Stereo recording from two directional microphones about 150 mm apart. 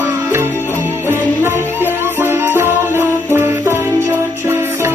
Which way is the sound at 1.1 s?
15° right (ahead or behind).